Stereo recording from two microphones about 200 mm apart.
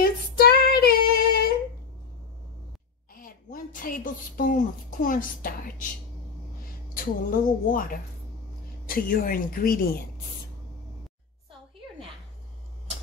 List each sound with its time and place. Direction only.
0.0 s female singing: 50° left (ahead or behind)
3.2 s speech: 45° left (ahead or behind)
6.9 s a woman's voice: 45° left (ahead or behind)